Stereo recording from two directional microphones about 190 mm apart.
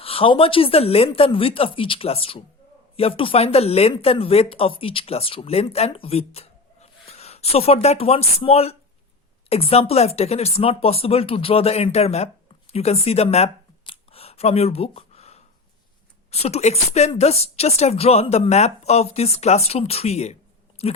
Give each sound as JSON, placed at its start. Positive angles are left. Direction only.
{"t": 0.0, "sound": "speech", "side_deg": 30}